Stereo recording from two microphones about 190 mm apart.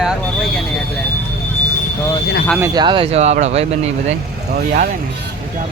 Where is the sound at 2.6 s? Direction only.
25° right (ahead or behind).